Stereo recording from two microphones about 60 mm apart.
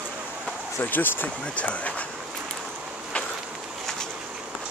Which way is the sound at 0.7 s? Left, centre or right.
Left.